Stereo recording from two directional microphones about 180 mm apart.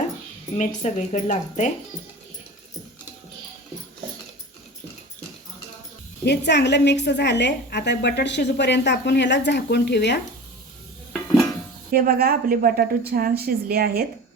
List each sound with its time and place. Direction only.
0.8 s speech: 40° left (ahead or behind)
6.2 s a woman's voice: 70° left (ahead or behind)
11.9 s a woman's voice: 55° right (ahead or behind)